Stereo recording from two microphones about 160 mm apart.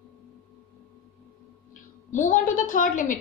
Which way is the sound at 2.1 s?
55° left (ahead or behind).